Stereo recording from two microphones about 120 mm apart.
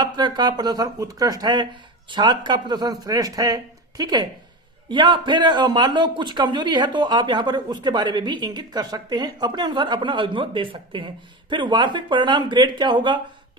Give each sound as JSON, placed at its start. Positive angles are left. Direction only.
{"t": 0.0, "sound": "a man's voice", "side_deg": -35}